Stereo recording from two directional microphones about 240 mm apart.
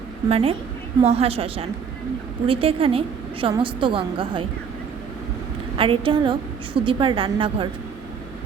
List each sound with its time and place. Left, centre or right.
0.3 s a woman's voice: right
5.7 s a woman's voice: right